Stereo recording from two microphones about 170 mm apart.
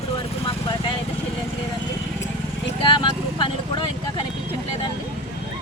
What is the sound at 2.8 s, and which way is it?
Vehicle, 30° left (ahead or behind).